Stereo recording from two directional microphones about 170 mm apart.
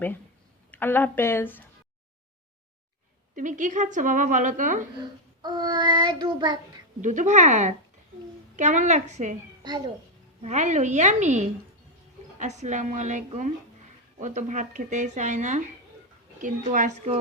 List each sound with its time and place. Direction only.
0.7 s speech: 10° left (ahead or behind)
3.3 s a woman's voice: 50° right (ahead or behind)
5.4 s child singing: 25° right (ahead or behind)
7.0 s a woman's voice: 45° right (ahead or behind)
10.4 s a woman's voice: 45° right (ahead or behind)